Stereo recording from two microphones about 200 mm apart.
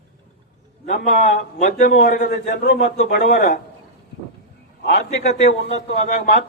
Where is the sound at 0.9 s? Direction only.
40° left (ahead or behind).